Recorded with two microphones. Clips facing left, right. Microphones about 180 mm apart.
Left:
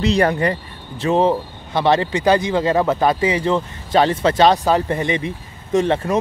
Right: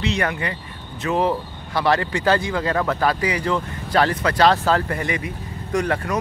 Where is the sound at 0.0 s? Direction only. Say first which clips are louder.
Left 7 dB; 35° left (ahead or behind).